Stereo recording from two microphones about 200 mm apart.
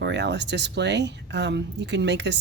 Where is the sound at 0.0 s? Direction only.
60° right (ahead or behind).